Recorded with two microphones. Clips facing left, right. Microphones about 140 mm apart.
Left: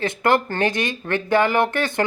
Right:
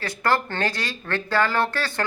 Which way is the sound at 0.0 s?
20° left (ahead or behind).